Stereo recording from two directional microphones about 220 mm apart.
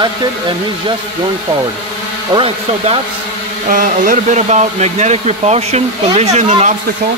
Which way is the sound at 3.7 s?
40° right (ahead or behind).